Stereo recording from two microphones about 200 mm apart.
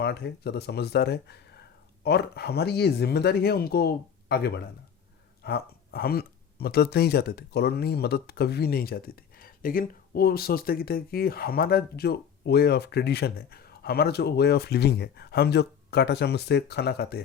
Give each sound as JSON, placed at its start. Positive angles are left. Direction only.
{"t": 0.0, "sound": "speech", "side_deg": 55}